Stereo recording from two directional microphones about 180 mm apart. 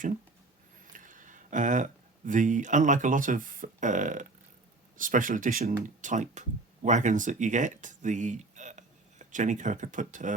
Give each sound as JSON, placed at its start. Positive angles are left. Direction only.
{"t": 0.9, "sound": "speech", "side_deg": -45}